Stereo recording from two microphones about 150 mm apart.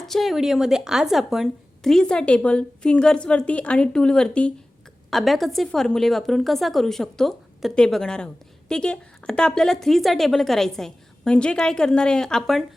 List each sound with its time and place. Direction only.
0.0 s speech: centre (ahead or behind)